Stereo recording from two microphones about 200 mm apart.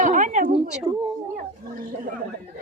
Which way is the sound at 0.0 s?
40° right (ahead or behind).